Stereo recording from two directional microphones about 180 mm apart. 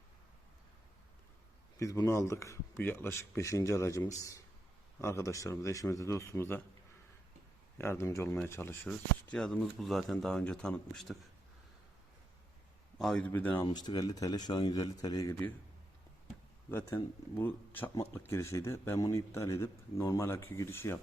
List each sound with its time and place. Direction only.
1.8 s speech: 15° left (ahead or behind)
7.8 s speech: 15° left (ahead or behind)
13.0 s speech: 5° left (ahead or behind)
13.7 s speech: 25° left (ahead or behind)
16.7 s speech: 15° left (ahead or behind)